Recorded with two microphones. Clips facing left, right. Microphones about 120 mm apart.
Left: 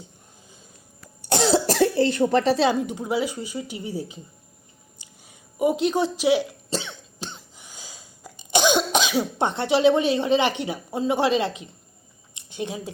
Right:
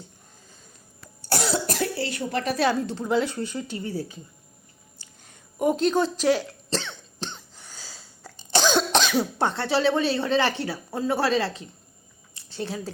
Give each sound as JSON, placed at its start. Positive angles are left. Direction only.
{"t": 1.2, "sound": "cough", "side_deg": 25}
{"t": 2.4, "sound": "speech", "side_deg": 30}
{"t": 2.6, "sound": "a woman's voice", "side_deg": 15}
{"t": 4.9, "sound": "hiccup", "side_deg": 10}
{"t": 9.4, "sound": "a woman's voice", "side_deg": 20}
{"t": 12.3, "sound": "a sound", "side_deg": 15}